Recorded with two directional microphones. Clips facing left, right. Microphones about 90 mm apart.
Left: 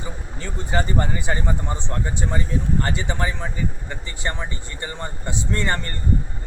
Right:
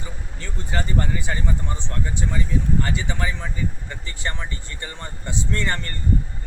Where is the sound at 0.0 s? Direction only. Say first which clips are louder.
Left 4 dB; 20° left (ahead or behind).